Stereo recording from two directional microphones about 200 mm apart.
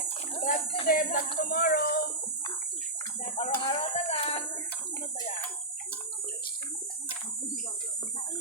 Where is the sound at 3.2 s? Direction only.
30° left (ahead or behind).